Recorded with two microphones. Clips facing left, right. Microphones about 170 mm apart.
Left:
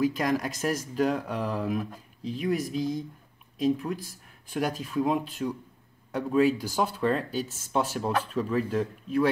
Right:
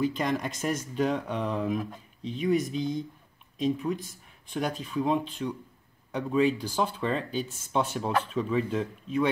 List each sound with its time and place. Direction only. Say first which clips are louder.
0.0 s speech: left 2 dB; 5° left (ahead or behind)